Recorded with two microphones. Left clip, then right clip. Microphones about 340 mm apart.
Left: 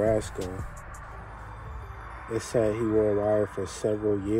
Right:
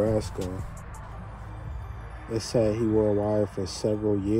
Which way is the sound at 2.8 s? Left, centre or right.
Centre.